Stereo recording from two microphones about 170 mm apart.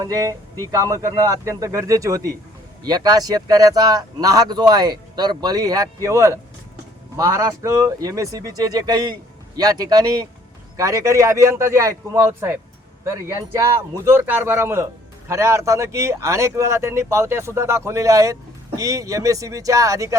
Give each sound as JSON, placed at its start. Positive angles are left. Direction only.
{"t": 0.0, "sound": "speech", "side_deg": -20}